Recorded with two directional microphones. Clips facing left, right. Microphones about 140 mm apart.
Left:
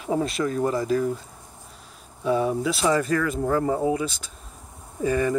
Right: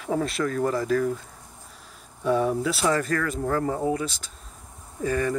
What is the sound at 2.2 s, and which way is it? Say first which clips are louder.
Speech: even; 5° left (ahead or behind).